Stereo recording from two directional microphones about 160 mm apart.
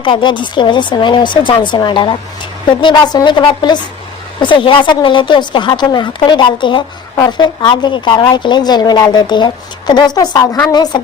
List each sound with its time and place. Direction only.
0.0 s speech: 30° left (ahead or behind)